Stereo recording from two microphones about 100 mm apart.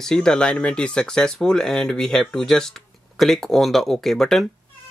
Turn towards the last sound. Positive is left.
turn(degrees=5)  # may be behind; listen again after turning